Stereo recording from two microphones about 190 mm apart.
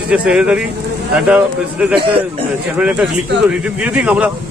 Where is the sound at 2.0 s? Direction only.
25° right (ahead or behind).